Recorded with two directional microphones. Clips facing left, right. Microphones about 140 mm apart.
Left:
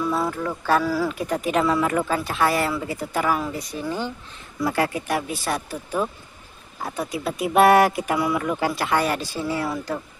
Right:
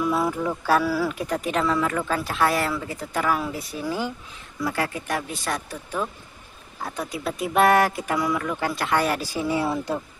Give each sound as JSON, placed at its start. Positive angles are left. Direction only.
{"t": 0.0, "sound": "speech", "side_deg": -5}
{"t": 2.1, "sound": "speech", "side_deg": 0}
{"t": 4.6, "sound": "speech", "side_deg": 25}
{"t": 4.9, "sound": "speech", "side_deg": 10}
{"t": 9.2, "sound": "speech", "side_deg": -15}